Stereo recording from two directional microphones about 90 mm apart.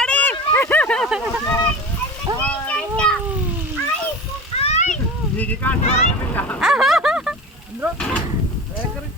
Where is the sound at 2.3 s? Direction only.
50° right (ahead or behind).